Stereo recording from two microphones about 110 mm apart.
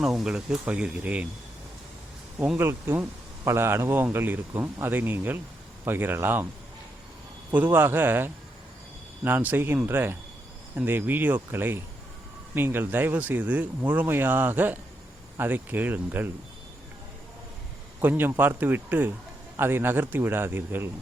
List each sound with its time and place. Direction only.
0.0 s speech: 5° right (ahead or behind)
2.6 s speech: 20° right (ahead or behind)
7.5 s speech: 20° right (ahead or behind)
18.0 s speech: 20° right (ahead or behind)